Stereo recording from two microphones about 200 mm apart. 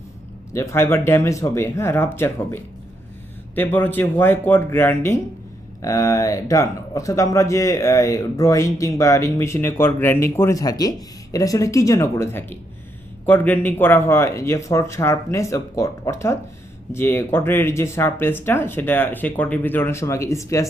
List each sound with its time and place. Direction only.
0.5 s speech: 15° left (ahead or behind)